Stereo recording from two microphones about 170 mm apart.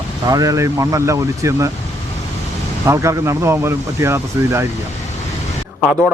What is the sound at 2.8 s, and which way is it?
Speech, 15° right (ahead or behind).